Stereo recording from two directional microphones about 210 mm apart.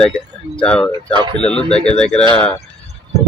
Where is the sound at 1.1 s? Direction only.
20° right (ahead or behind).